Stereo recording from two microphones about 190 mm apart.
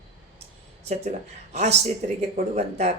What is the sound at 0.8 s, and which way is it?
Speech, 35° right (ahead or behind).